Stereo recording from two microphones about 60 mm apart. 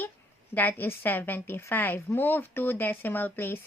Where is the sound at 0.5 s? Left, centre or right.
Left.